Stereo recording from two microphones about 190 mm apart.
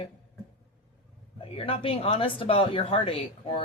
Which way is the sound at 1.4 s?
30° left (ahead or behind).